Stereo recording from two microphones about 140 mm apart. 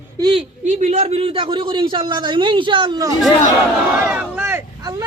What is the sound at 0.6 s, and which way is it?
A man's voice, 55° right (ahead or behind).